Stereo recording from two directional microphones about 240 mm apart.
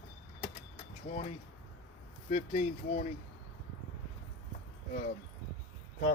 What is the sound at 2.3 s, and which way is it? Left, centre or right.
Speech, left.